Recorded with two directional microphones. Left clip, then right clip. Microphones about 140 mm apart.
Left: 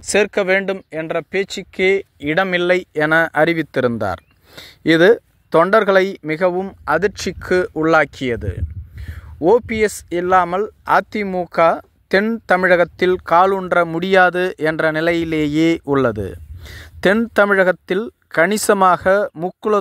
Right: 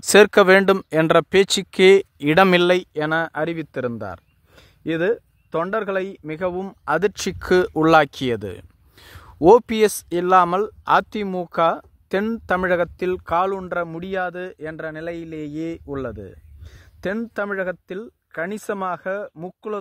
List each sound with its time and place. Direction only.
0.0 s speech: 30° right (ahead or behind)
2.9 s speech: 10° left (ahead or behind)
6.7 s speech: centre (ahead or behind); by 19.8 s 35° left (ahead or behind)